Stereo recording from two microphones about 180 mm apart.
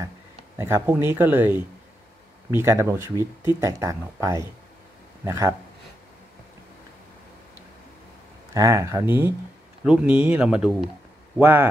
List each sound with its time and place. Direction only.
0.6 s a man's voice: 15° right (ahead or behind)
8.5 s speech: 15° right (ahead or behind)